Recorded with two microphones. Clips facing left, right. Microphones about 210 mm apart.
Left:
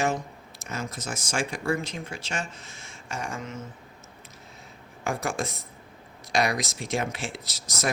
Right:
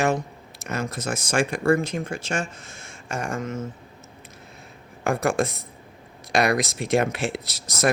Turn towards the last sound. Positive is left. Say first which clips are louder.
# right 7 dB
turn(degrees=-60)  # may be behind; listen again after turning